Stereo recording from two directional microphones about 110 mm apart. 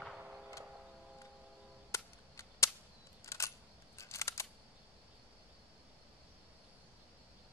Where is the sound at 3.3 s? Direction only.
25° left (ahead or behind).